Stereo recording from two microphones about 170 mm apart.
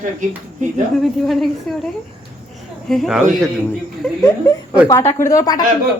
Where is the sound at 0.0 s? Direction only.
45° right (ahead or behind).